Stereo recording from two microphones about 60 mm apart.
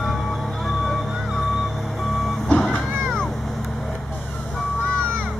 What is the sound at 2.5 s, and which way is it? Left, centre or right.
Vehicle, centre.